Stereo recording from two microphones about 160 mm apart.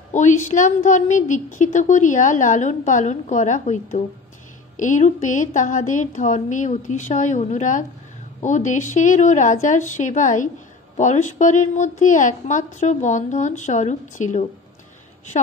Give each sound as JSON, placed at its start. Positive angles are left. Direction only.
{"t": 0.1, "sound": "a woman's voice", "side_deg": 50}